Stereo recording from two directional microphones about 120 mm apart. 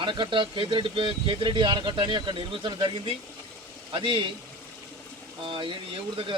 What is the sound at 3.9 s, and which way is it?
Speech, 45° right (ahead or behind).